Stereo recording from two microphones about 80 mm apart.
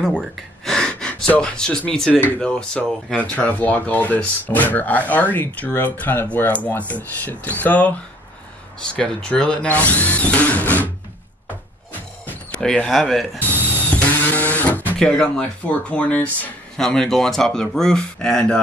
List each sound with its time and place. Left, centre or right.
0.4 s gasp: centre
2.4 s speech: centre
12.3 s speech: centre
13.4 s a sound: left
15.0 s speech: centre
16.8 s speech: centre